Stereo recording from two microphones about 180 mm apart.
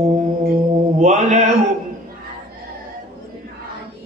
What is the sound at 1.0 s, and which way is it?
Mantra, 40° right (ahead or behind).